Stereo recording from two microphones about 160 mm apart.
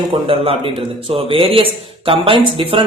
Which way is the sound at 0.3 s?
35° right (ahead or behind).